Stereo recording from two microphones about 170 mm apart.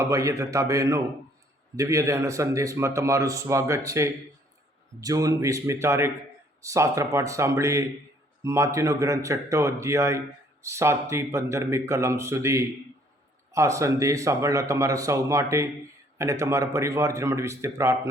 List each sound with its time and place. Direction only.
0.0 s a man's voice: 20° right (ahead or behind)